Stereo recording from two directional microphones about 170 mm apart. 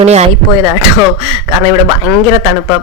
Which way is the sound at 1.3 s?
25° right (ahead or behind).